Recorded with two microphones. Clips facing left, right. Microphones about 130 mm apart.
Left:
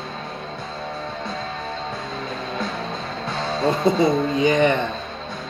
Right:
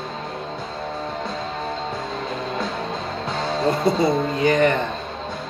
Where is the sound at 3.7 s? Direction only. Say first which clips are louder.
Left 1 dB; 20° left (ahead or behind).